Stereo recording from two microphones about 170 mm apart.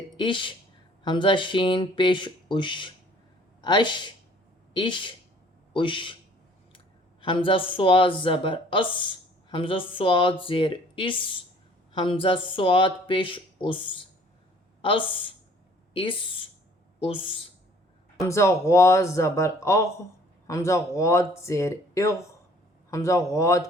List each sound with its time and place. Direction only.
0.2 s speech: 30° left (ahead or behind)
18.3 s speech: 15° left (ahead or behind)